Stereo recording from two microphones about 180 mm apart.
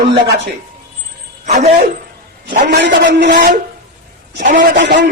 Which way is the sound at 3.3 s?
45° right (ahead or behind).